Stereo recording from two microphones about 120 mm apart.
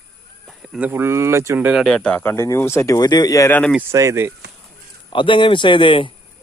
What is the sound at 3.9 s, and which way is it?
Speech, 25° right (ahead or behind).